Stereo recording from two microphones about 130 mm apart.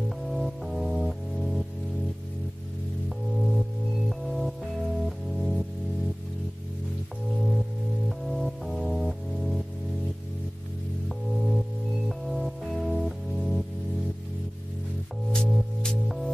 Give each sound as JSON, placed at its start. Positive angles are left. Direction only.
{"t": 0.3, "sound": "music", "side_deg": 0}
{"t": 3.1, "sound": "music", "side_deg": 0}
{"t": 8.3, "sound": "music", "side_deg": 0}
{"t": 11.1, "sound": "music", "side_deg": 0}
{"t": 15.3, "sound": "music", "side_deg": 5}